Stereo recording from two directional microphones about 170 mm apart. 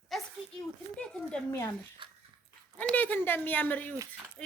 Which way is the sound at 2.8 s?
10° left (ahead or behind).